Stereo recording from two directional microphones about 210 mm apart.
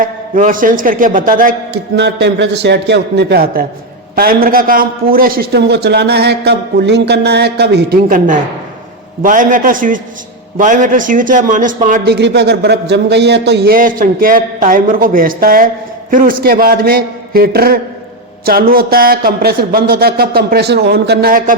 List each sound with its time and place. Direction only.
0.0 s a man's voice: 40° right (ahead or behind)
12.0 s a man's voice: 55° right (ahead or behind)